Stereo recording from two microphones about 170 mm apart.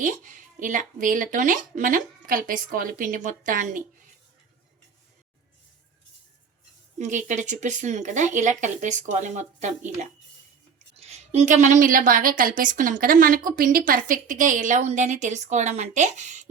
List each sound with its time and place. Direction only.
0.0 s a woman's voice: 50° right (ahead or behind)
7.0 s a woman's voice: 45° right (ahead or behind)